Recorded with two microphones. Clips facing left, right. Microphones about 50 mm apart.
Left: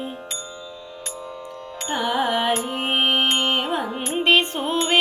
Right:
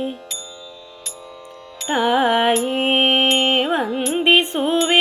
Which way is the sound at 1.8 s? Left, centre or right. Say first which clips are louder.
Right 6 dB; centre.